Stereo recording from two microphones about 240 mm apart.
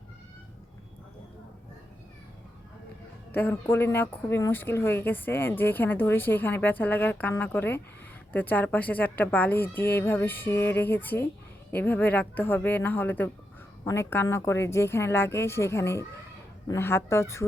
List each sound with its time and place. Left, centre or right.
3.3 s speech: centre